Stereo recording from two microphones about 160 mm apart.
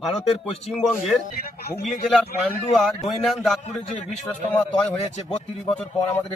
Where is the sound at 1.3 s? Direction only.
70° left (ahead or behind).